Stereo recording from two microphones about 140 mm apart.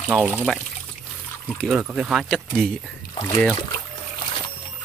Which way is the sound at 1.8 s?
5° right (ahead or behind).